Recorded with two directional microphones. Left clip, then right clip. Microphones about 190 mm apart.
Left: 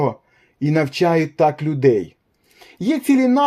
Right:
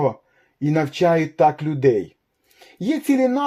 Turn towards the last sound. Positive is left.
turn(degrees=25)  # may be behind; listen again after turning